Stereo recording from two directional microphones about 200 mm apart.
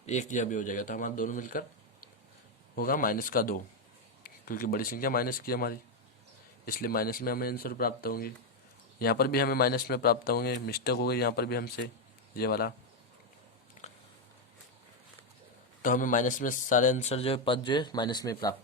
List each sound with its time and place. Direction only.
0.0 s speech: 35° left (ahead or behind)
2.7 s a man's voice: 45° left (ahead or behind)
13.8 s a sound: 35° left (ahead or behind)
15.8 s a man's voice: 40° left (ahead or behind); by 18.5 s 20° left (ahead or behind)